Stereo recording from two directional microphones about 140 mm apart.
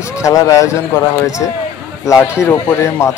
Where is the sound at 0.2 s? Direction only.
25° left (ahead or behind).